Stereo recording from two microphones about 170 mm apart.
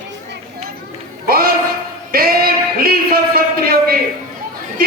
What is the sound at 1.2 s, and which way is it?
Speech, 60° right (ahead or behind).